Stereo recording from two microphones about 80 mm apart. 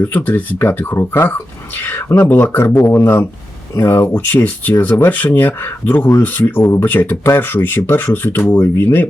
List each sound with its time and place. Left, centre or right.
0.0 s speech: left